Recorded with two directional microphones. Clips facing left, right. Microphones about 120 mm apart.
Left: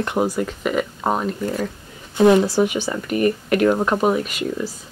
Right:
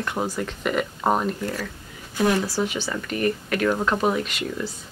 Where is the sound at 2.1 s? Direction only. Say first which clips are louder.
Left 8 dB; 25° left (ahead or behind).